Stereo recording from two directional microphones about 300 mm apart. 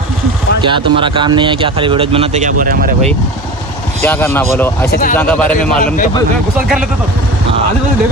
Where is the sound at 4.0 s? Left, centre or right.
Centre.